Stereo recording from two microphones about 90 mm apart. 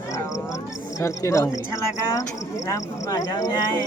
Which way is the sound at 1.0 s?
35° left (ahead or behind).